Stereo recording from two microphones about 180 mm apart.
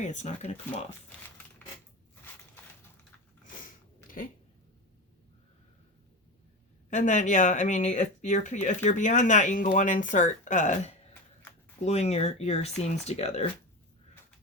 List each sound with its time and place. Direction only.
0.0 s speech: 40° left (ahead or behind)
6.9 s speech: 40° left (ahead or behind)